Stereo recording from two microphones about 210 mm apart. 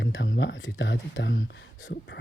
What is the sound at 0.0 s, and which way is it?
Speech, 60° left (ahead or behind).